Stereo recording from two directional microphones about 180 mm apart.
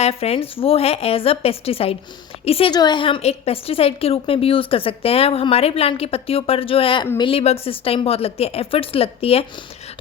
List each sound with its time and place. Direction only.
0.0 s a woman's voice: 35° left (ahead or behind)